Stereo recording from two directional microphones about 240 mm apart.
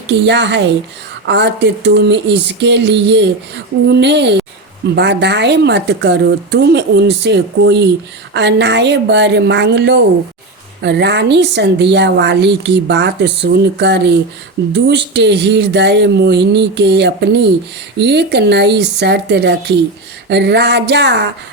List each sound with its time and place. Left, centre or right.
0.1 s a woman's voice: right